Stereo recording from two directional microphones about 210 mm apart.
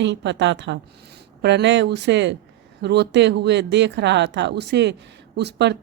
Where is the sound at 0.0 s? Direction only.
55° right (ahead or behind).